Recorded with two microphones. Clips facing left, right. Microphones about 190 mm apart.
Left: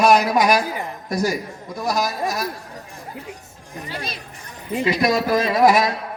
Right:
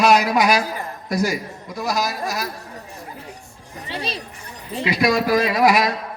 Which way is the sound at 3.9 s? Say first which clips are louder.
Right 4 dB; 30° right (ahead or behind).